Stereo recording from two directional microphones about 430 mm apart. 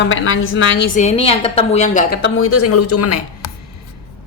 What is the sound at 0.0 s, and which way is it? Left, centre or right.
A woman's voice, left.